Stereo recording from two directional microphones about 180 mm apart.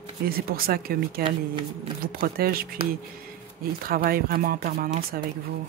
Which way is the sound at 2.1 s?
55° right (ahead or behind).